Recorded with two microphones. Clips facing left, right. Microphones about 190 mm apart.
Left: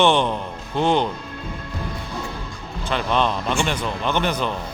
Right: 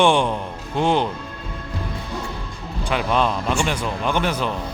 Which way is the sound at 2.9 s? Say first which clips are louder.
Right 1 dB; 5° right (ahead or behind).